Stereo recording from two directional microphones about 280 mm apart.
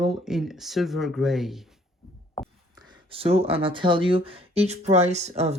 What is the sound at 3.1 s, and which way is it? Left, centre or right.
Speech, centre.